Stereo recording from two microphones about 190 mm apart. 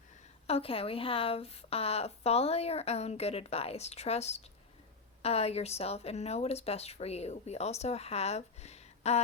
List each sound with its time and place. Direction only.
0.4 s a woman's voice: 30° left (ahead or behind)